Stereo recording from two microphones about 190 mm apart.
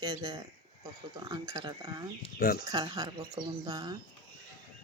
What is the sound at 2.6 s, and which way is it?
Speech, 20° right (ahead or behind).